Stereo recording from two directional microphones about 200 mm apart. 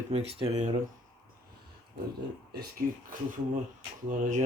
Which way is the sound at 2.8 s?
45° right (ahead or behind).